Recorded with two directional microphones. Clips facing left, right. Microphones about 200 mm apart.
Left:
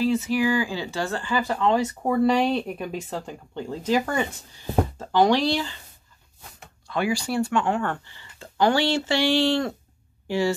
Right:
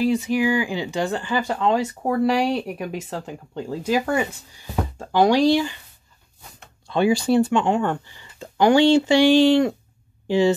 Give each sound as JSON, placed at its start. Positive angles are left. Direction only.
{"t": 0.0, "sound": "speech", "side_deg": -15}
{"t": 1.6, "sound": "speech", "side_deg": -5}
{"t": 6.9, "sound": "speech", "side_deg": -25}